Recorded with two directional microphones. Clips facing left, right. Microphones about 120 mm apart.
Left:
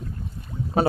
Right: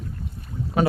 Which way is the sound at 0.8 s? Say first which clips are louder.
Left 1 dB; 35° left (ahead or behind).